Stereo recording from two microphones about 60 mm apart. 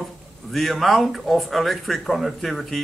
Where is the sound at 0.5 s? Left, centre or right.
Centre.